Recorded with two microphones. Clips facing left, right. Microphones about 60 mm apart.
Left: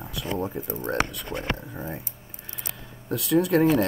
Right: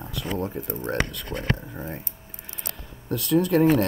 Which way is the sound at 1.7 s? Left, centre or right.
Centre.